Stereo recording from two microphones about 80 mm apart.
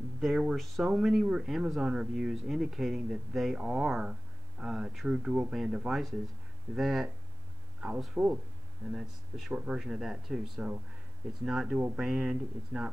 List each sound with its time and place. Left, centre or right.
0.2 s speech: centre
8.1 s speech: centre
9.5 s speech: centre